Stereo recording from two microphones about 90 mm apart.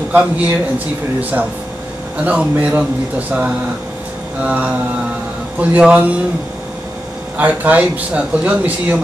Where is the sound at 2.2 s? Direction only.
15° right (ahead or behind).